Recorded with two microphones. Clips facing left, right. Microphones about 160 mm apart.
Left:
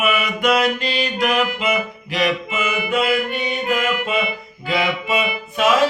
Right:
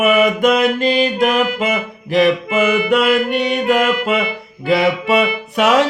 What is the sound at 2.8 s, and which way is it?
Music, 70° right (ahead or behind).